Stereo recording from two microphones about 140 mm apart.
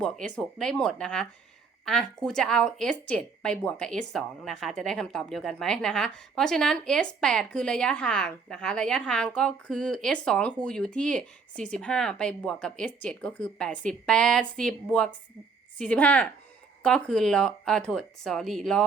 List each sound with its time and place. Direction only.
0.0 s a woman's voice: 5° left (ahead or behind)